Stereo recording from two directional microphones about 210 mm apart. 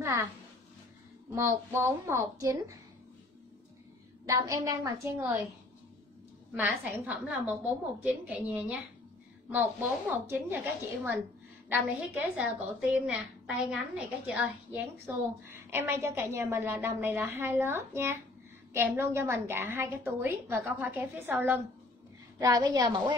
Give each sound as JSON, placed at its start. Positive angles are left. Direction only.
{"t": 1.3, "sound": "a woman's voice", "side_deg": -10}
{"t": 4.3, "sound": "a woman's voice", "side_deg": -15}
{"t": 6.5, "sound": "a woman's voice", "side_deg": -10}